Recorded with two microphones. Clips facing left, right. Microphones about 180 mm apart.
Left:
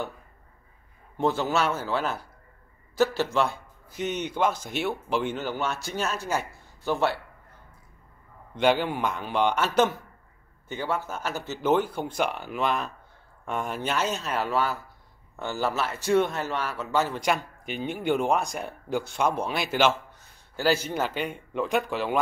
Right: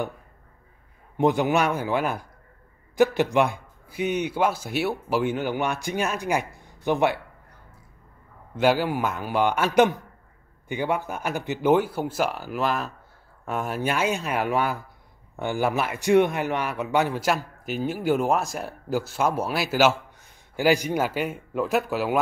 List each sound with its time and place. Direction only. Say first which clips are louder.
1.1 s a man's voice: right 4 dB; 15° right (ahead or behind)
8.5 s a man's voice: right 2 dB; 5° right (ahead or behind)
17.2 s speech: right 2 dB; 5° right (ahead or behind)